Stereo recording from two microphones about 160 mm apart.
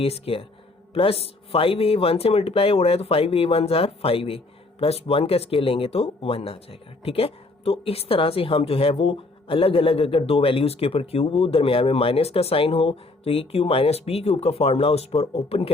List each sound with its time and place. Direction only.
0.0 s speech: 35° left (ahead or behind)